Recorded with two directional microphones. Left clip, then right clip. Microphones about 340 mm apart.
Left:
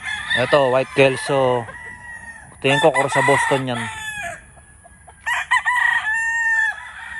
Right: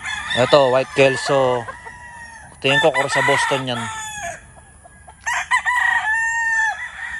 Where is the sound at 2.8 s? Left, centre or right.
Centre.